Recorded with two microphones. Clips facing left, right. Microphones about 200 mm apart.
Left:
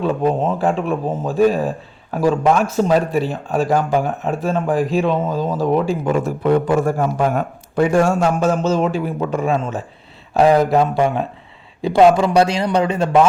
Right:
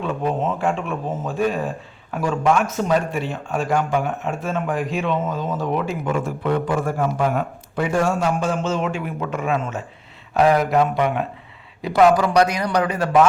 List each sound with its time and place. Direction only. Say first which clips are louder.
0.0 s a man's voice: left 5 dB; 35° left (ahead or behind)